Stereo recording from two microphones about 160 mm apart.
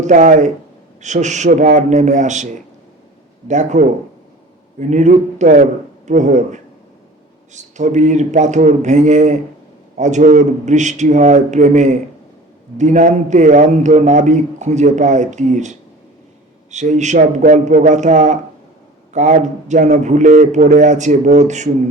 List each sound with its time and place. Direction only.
0.0 s a man's voice: 50° right (ahead or behind)
3.5 s a man's voice: 50° right (ahead or behind)